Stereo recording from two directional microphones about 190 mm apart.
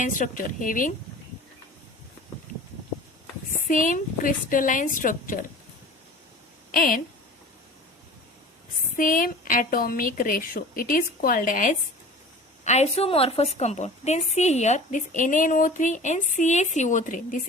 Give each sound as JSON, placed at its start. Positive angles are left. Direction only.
{"t": 0.0, "sound": "a woman's voice", "side_deg": 45}
{"t": 3.7, "sound": "a woman's voice", "side_deg": 45}
{"t": 6.7, "sound": "speech", "side_deg": 45}
{"t": 9.0, "sound": "a woman's voice", "side_deg": 45}
{"t": 12.6, "sound": "speech", "side_deg": 35}